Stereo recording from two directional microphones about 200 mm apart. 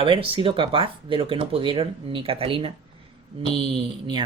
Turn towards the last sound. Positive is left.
turn(degrees=-25)  # may be behind; listen again after turning